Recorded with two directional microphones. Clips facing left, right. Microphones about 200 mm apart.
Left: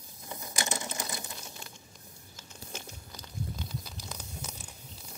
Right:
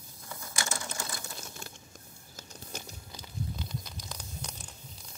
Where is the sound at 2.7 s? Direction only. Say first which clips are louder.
Even; 40° right (ahead or behind).